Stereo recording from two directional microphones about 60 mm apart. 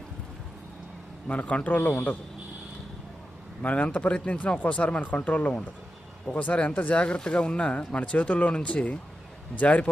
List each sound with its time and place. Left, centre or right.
1.3 s speech: left
3.6 s speech: left